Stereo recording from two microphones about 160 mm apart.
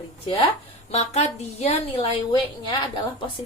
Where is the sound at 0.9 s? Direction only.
40° left (ahead or behind).